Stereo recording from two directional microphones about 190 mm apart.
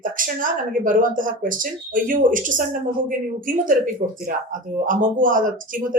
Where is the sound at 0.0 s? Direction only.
45° right (ahead or behind).